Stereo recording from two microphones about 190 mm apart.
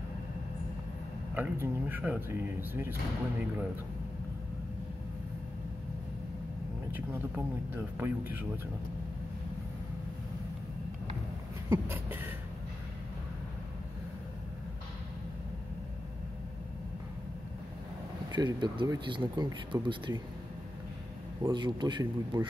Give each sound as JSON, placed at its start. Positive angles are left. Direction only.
{"t": 1.3, "sound": "speech", "side_deg": -10}
{"t": 6.9, "sound": "speech", "side_deg": -10}
{"t": 11.7, "sound": "a sound", "side_deg": -10}
{"t": 18.3, "sound": "speech", "side_deg": -25}
{"t": 21.4, "sound": "speech", "side_deg": -20}